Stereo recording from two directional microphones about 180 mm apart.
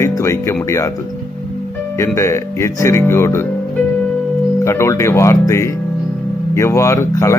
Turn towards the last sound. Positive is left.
turn(degrees=15)  # may be behind; listen again after turning